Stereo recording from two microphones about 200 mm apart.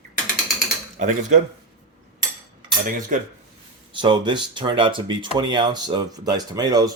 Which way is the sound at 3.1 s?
40° right (ahead or behind).